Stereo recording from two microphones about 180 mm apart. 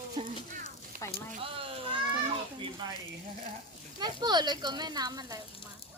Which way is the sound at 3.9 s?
25° right (ahead or behind).